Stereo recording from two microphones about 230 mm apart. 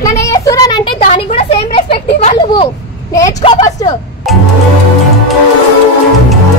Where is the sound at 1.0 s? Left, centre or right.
Left.